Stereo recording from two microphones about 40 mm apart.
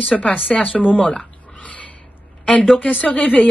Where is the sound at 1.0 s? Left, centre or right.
Left.